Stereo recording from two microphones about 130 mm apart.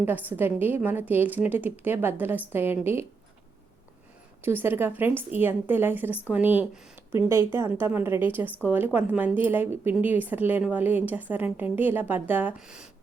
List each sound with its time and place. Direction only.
0.0 s speech: 15° right (ahead or behind)
4.4 s speech: 15° right (ahead or behind)